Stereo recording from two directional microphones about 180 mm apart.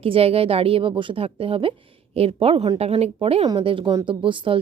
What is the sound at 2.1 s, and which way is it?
Speech, 35° right (ahead or behind).